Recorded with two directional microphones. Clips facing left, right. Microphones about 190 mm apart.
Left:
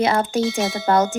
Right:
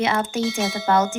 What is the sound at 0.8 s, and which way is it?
Speech, 40° left (ahead or behind).